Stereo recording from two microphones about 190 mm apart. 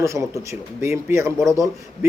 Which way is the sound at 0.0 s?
15° right (ahead or behind).